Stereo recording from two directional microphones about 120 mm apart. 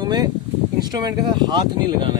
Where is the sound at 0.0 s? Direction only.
35° right (ahead or behind).